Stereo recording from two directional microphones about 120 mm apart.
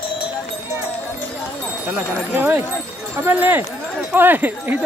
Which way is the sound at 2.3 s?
15° right (ahead or behind).